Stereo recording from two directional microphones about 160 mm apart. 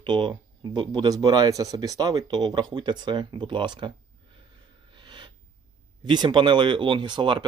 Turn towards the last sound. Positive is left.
turn(degrees=-30)  # may be behind; listen again after turning